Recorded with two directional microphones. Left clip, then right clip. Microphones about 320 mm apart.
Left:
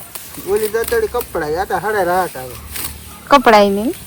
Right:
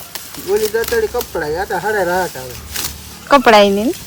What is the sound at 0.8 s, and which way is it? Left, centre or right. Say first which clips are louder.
Speech: even; centre.